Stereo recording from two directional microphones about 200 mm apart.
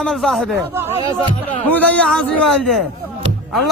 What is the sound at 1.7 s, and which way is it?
Speech, 5° left (ahead or behind).